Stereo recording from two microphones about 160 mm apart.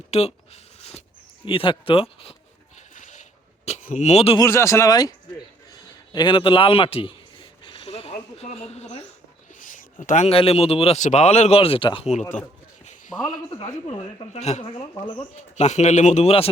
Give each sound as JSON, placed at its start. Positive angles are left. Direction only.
{"t": 0.1, "sound": "a sound", "side_deg": 40}
{"t": 1.5, "sound": "a man's voice", "side_deg": 35}
{"t": 2.9, "sound": "sheep", "side_deg": 50}
{"t": 3.7, "sound": "speech", "side_deg": 50}
{"t": 4.4, "sound": "a man's voice", "side_deg": 15}
{"t": 7.6, "sound": "a sound", "side_deg": 30}
{"t": 9.6, "sound": "a man's voice", "side_deg": 55}
{"t": 13.2, "sound": "a man's voice", "side_deg": 25}
{"t": 14.3, "sound": "speech", "side_deg": 45}
{"t": 14.9, "sound": "a man's voice", "side_deg": 20}
{"t": 15.5, "sound": "speech", "side_deg": 45}